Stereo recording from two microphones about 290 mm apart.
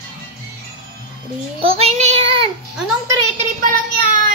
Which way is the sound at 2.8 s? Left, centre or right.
Centre.